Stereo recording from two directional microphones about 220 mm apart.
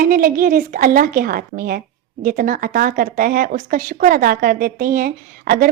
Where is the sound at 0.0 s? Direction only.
40° right (ahead or behind).